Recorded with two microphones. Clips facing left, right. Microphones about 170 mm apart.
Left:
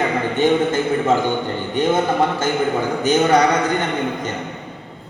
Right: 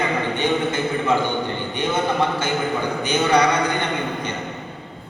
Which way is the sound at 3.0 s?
45° left (ahead or behind).